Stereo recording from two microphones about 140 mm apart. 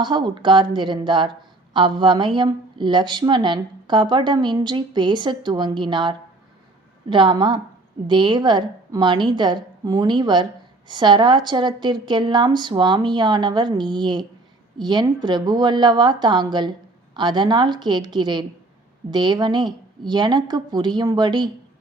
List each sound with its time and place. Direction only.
0.0 s a woman's voice: 35° right (ahead or behind)